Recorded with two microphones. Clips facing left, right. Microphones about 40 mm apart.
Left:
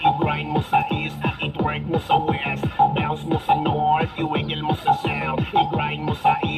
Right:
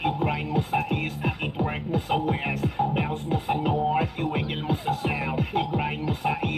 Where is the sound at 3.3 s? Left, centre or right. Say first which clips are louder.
Left 7 dB; left.